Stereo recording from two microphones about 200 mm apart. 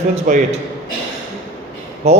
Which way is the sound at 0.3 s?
40° right (ahead or behind).